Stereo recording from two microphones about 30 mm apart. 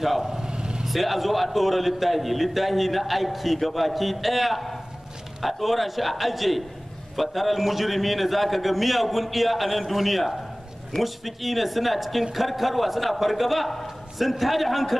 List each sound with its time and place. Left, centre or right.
0.0 s a man's voice: centre
0.5 s vehicle: right
0.8 s a man's voice: centre